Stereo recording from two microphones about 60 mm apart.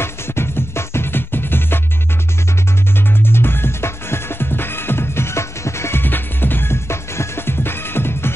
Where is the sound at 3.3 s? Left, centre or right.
Left.